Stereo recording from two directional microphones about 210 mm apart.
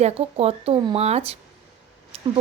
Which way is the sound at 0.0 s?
30° right (ahead or behind).